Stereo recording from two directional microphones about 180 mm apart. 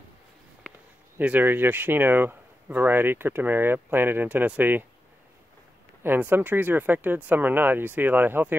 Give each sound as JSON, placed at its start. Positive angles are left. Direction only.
{"t": 1.1, "sound": "speech", "side_deg": -10}
{"t": 6.0, "sound": "speech", "side_deg": -10}